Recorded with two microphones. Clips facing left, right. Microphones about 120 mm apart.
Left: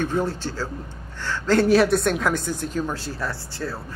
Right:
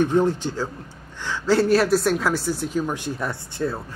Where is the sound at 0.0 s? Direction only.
15° right (ahead or behind).